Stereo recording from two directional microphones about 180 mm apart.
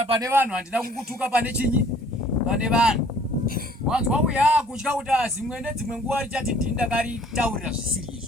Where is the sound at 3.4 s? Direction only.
55° right (ahead or behind).